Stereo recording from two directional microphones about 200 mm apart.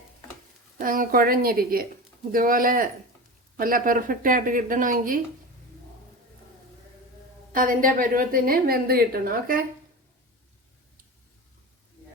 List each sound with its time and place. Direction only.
0.8 s a woman's voice: 45° right (ahead or behind)
7.5 s a woman's voice: 45° right (ahead or behind)